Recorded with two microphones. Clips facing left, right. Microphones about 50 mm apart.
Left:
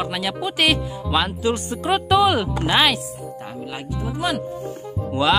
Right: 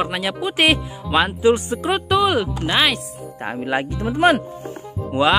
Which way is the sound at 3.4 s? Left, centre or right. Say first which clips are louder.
Right 13 dB; right.